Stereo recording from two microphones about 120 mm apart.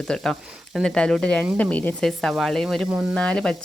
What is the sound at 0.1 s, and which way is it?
Speech, 5° left (ahead or behind).